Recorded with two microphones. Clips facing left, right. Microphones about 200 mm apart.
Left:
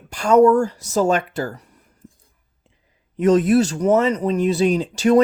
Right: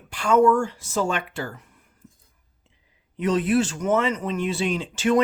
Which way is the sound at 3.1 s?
45° left (ahead or behind).